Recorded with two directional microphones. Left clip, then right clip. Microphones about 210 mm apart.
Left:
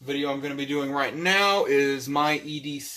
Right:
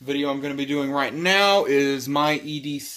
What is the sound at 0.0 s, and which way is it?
Speech, 55° right (ahead or behind).